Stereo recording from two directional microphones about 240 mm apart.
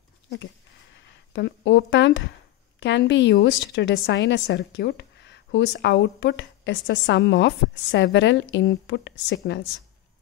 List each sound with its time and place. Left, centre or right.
0.9 s a woman's voice: left